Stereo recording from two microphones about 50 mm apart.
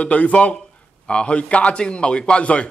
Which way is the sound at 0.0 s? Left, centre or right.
Left.